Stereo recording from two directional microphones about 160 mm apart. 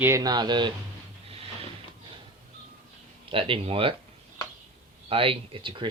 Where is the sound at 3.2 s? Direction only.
35° right (ahead or behind).